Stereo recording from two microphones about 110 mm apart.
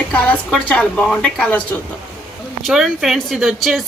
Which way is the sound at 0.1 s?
10° left (ahead or behind).